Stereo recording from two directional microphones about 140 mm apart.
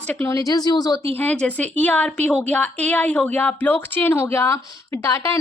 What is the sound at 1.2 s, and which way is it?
A woman's voice, 10° left (ahead or behind).